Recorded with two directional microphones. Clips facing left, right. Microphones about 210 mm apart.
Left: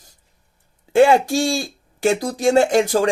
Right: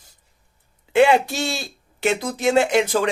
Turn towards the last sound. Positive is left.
turn(degrees=45)  # may be behind; listen again after turning